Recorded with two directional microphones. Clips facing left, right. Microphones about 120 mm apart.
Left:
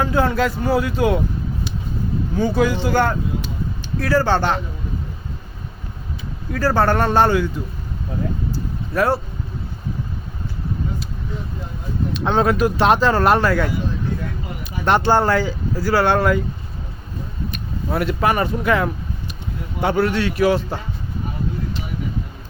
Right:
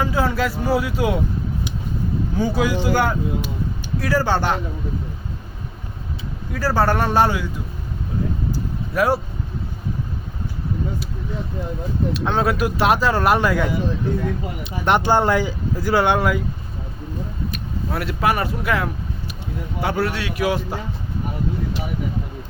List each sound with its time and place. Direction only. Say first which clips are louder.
0.0 s speech: left 2 dB; 5° right (ahead or behind)
2.4 s speech: left 2 dB; 10° right (ahead or behind)
6.5 s speech: left 2 dB; 10° right (ahead or behind)
8.5 s a sound: left 1 dB; 10° right (ahead or behind)
12.1 s speech: left 4 dB; 5° right (ahead or behind)
17.5 s speech: left 5 dB; centre (ahead or behind)